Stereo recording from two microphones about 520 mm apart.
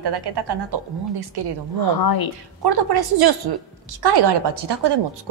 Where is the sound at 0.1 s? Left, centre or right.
Right.